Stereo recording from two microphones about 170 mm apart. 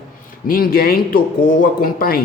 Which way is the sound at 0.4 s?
60° left (ahead or behind).